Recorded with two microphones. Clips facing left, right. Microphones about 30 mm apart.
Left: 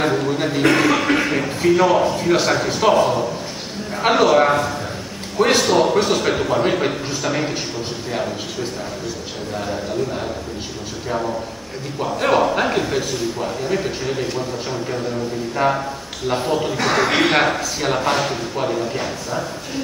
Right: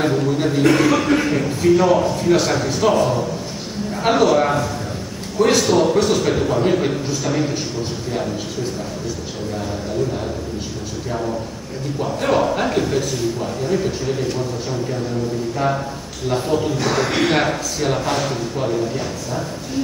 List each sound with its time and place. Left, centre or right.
0.0 s a man's voice: centre
11.1 s a man's voice: centre